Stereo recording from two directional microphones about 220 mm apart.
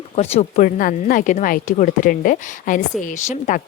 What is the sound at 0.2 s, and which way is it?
Speech, 30° left (ahead or behind).